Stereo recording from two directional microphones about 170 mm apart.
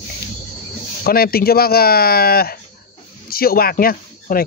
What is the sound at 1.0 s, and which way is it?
Speech, 60° left (ahead or behind).